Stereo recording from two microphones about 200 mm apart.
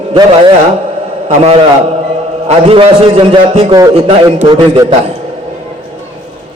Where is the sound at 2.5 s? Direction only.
30° right (ahead or behind).